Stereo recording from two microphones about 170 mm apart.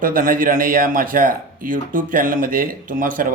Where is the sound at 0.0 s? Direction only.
55° right (ahead or behind).